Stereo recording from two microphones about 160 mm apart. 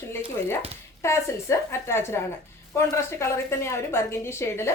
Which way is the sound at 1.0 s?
15° left (ahead or behind).